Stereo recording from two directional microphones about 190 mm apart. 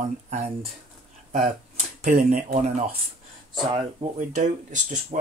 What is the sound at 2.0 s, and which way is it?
Speech, 45° right (ahead or behind).